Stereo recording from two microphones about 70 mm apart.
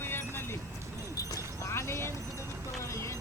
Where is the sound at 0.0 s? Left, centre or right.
Left.